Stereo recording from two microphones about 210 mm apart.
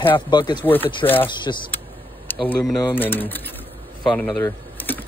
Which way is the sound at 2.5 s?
10° left (ahead or behind).